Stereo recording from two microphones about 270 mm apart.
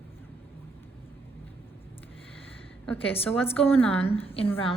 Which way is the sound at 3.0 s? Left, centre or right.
Left.